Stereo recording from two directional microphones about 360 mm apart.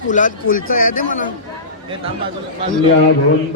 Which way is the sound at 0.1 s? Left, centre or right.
Left.